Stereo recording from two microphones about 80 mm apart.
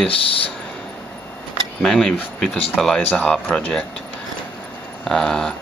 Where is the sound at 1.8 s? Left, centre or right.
Centre.